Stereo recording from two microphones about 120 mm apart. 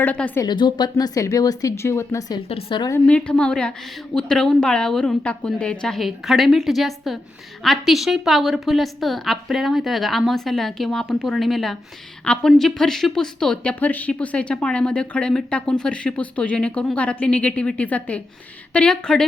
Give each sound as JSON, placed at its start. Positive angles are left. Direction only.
{"t": 0.0, "sound": "speech", "side_deg": 15}
{"t": 0.4, "sound": "speech", "side_deg": 40}
{"t": 2.5, "sound": "a woman's voice", "side_deg": 55}
{"t": 3.1, "sound": "a woman's voice", "side_deg": 10}